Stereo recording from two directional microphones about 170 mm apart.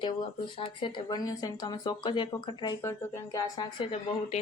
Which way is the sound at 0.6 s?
30° left (ahead or behind).